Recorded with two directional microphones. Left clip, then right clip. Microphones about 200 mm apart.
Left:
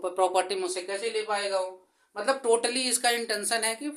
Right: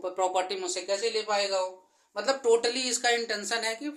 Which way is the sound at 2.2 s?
15° left (ahead or behind).